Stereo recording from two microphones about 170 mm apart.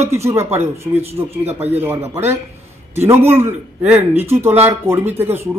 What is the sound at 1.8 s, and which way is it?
A man's voice, 15° right (ahead or behind).